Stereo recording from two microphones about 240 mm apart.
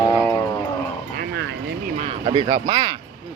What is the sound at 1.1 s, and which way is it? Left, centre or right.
Bow-wow, right.